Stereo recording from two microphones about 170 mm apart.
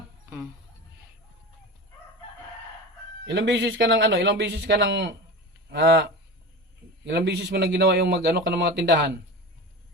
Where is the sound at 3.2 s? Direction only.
90° right.